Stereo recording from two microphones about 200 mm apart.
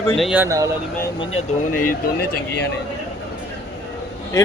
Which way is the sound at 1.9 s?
55° left (ahead or behind).